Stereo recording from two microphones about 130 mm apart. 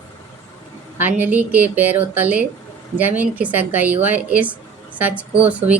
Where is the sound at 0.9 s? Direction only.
15° right (ahead or behind).